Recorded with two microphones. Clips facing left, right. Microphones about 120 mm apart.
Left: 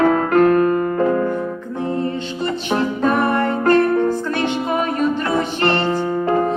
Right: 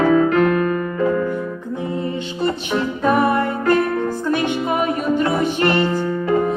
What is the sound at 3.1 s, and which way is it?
Music, 15° right (ahead or behind).